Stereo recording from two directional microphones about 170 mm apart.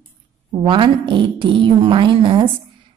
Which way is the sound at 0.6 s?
25° right (ahead or behind).